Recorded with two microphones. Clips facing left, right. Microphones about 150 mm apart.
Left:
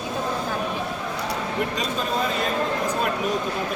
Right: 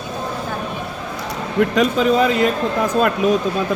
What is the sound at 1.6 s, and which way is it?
Speech, 80° right.